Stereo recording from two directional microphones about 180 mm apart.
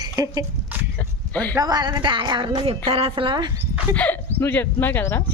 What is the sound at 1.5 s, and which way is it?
A woman's voice, 20° right (ahead or behind).